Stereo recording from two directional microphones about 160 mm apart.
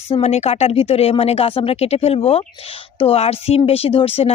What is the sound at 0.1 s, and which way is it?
A woman's voice, 40° left (ahead or behind).